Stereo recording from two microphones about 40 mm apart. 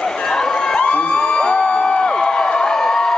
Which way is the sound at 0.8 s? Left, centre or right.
Left.